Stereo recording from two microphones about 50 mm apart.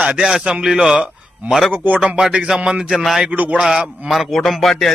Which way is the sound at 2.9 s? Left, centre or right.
Centre.